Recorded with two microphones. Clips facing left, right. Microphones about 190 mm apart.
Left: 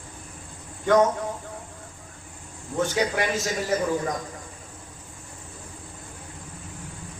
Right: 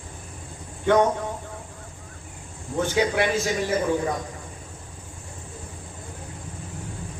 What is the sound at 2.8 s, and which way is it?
Speech, 40° left (ahead or behind).